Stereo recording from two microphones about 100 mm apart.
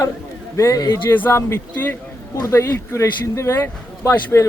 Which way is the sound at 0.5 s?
35° left (ahead or behind).